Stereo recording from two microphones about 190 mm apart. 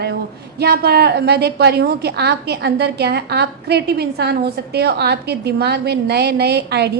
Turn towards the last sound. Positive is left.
turn(degrees=-60)  # may be behind; listen again after turning